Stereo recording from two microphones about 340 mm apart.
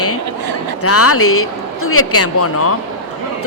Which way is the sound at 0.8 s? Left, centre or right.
Left.